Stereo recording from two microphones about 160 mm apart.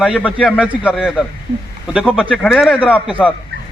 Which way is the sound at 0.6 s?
5° right (ahead or behind).